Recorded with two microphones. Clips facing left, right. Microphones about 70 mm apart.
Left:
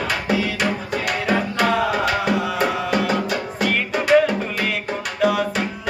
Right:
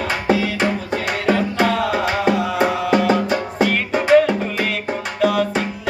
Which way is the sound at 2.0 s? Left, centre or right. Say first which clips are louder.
Right 2 dB; right.